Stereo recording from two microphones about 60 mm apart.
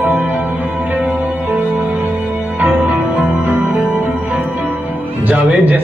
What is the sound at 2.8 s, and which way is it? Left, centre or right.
Music, right.